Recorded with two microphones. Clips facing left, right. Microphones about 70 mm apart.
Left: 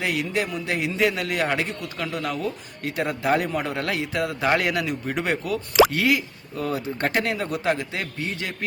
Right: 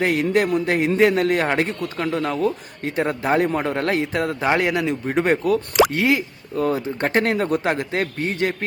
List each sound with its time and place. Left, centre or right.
0.0 s a man's voice: right
4.4 s speech: right
5.9 s a man's voice: right